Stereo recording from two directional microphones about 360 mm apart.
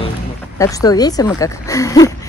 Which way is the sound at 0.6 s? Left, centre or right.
Centre.